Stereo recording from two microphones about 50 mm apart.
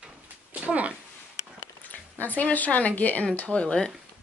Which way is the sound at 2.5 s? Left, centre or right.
Left.